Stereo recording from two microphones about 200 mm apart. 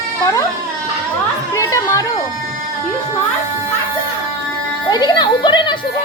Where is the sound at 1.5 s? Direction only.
15° left (ahead or behind).